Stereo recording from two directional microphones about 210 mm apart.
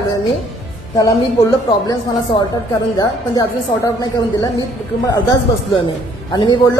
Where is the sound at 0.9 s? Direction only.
15° left (ahead or behind).